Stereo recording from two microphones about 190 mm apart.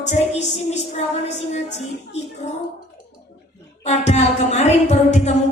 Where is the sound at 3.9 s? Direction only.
35° left (ahead or behind).